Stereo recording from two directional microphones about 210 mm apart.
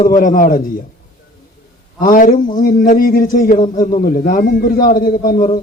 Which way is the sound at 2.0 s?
40° left (ahead or behind).